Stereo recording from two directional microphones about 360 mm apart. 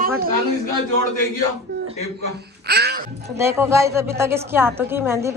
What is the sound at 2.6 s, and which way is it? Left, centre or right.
Music, right.